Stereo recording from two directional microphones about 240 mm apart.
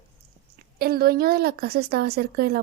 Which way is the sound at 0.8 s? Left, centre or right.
Right.